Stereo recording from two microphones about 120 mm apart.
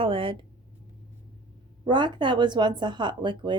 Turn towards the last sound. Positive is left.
turn(degrees=-40)  # may be behind; listen again after turning